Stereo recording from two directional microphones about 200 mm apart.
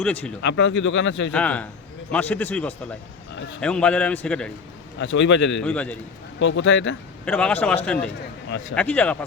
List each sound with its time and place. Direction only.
0.0 s a man's voice: 10° left (ahead or behind)
0.4 s speech: 65° left (ahead or behind)
1.3 s a man's voice: 5° left (ahead or behind)
4.9 s a man's voice: 65° left (ahead or behind)
5.5 s a man's voice: 5° left (ahead or behind)
6.4 s speech: 65° left (ahead or behind)
7.3 s a man's voice: 5° left (ahead or behind)
8.4 s speech: 60° left (ahead or behind)
8.7 s a man's voice: 5° left (ahead or behind)